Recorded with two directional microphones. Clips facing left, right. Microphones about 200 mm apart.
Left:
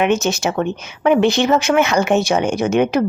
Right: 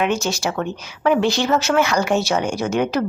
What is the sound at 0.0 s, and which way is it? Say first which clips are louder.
Speech: left 4 dB; 20° left (ahead or behind).